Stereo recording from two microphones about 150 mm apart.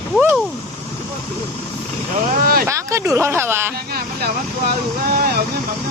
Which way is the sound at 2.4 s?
80° right.